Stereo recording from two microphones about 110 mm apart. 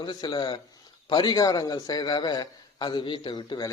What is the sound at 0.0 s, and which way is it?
A woman's voice, 40° left (ahead or behind).